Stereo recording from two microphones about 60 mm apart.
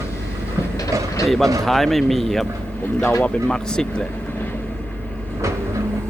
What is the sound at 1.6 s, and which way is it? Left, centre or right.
Speech, centre.